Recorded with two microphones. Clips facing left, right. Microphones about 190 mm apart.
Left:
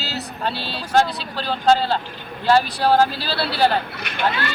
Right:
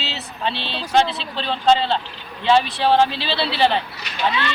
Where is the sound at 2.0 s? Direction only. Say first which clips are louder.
Left 3 dB; 50° left (ahead or behind).